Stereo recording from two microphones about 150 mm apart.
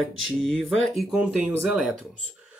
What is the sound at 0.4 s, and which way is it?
Speech, centre (ahead or behind).